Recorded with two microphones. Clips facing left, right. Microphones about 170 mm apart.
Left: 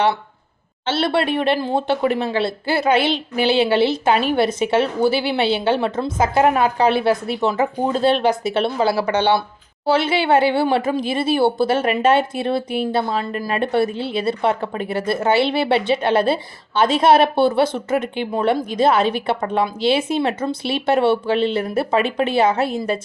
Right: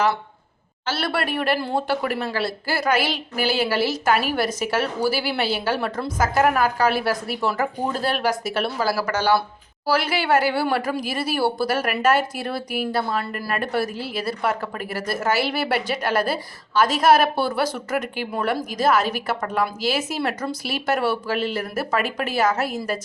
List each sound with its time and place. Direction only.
0.9 s speech: 25° left (ahead or behind)